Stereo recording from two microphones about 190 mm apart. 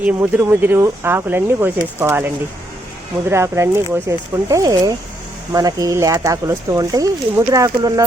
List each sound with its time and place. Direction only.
0.0 s speech: 10° right (ahead or behind)